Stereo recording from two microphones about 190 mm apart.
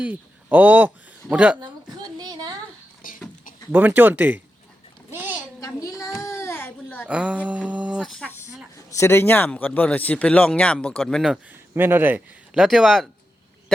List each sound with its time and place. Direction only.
0.0 s a man's voice: 10° right (ahead or behind)
2.1 s a sound: 20° right (ahead or behind)
3.0 s a sound: 45° left (ahead or behind)
3.7 s a man's voice: 10° right (ahead or behind)
5.1 s a sound: 10° right (ahead or behind)
5.5 s child singing: 15° left (ahead or behind)
6.2 s baby cry: 15° left (ahead or behind)
7.1 s speech: 5° right (ahead or behind)
11.7 s a man's voice: 10° right (ahead or behind)